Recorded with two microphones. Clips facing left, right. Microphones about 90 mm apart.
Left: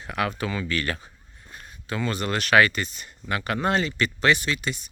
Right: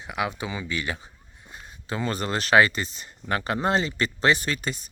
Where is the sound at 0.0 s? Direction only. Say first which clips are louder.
Left 2 dB; 15° right (ahead or behind).